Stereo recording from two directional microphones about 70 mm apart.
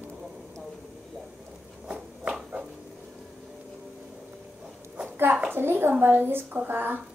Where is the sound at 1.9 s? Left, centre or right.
Centre.